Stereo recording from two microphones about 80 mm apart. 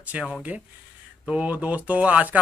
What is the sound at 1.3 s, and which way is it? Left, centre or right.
Speech, centre.